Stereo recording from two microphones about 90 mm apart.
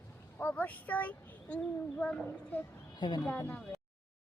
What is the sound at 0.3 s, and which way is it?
A child's voice, 15° left (ahead or behind).